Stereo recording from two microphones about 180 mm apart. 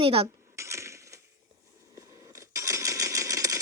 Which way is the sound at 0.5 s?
15° right (ahead or behind).